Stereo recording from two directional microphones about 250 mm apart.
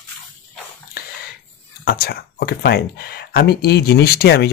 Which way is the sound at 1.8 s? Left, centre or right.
Left.